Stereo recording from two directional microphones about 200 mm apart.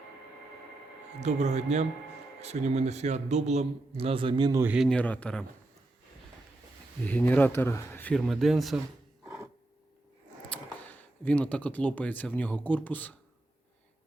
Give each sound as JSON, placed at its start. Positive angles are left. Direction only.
{"t": 1.2, "sound": "a man's voice", "side_deg": -35}
{"t": 4.6, "sound": "speech", "side_deg": -5}
{"t": 4.9, "sound": "speech", "side_deg": 5}
{"t": 7.0, "sound": "speech", "side_deg": 10}
{"t": 10.5, "sound": "speech", "side_deg": 5}